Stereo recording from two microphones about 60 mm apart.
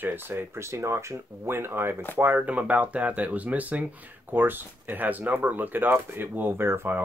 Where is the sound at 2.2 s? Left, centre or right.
Right.